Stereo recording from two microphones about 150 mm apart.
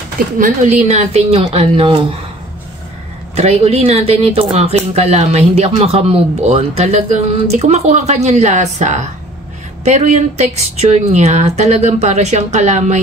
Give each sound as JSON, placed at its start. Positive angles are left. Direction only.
{"t": 0.4, "sound": "speech", "side_deg": -50}
{"t": 3.3, "sound": "speech", "side_deg": -45}